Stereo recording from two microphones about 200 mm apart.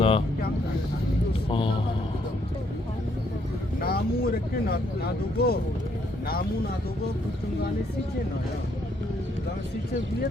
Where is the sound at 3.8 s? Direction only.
50° left (ahead or behind).